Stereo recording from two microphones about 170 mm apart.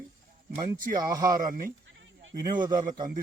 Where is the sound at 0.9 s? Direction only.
20° right (ahead or behind).